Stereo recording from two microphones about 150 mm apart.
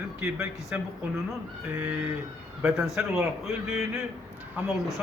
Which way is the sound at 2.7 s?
Centre (ahead or behind).